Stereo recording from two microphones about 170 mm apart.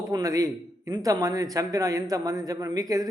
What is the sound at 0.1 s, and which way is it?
A man's voice, 20° right (ahead or behind).